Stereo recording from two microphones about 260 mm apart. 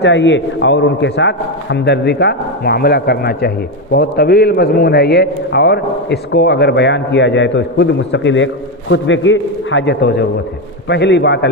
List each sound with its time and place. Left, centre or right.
0.0 s a man's voice: left